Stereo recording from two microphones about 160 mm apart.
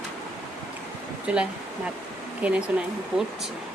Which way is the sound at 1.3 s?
10° right (ahead or behind).